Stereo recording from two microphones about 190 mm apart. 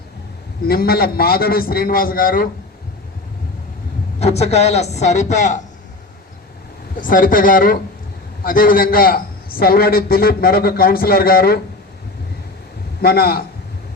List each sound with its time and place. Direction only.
0.7 s a man's voice: 55° left (ahead or behind)
4.2 s speech: 35° left (ahead or behind)
7.0 s a man's voice: 45° left (ahead or behind)
13.0 s a man's voice: 55° left (ahead or behind)